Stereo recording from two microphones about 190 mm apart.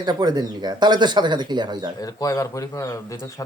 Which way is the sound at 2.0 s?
20° left (ahead or behind).